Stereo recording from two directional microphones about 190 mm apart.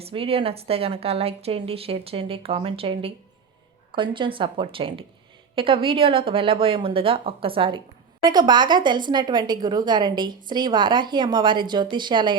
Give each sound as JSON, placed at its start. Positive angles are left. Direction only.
{"t": 0.0, "sound": "a woman's voice", "side_deg": -30}